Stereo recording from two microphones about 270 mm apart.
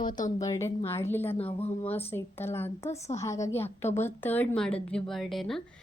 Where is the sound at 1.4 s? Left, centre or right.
Left.